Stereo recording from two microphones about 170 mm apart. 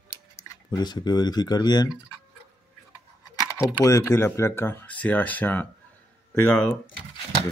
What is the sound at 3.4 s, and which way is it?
Speech, 20° left (ahead or behind).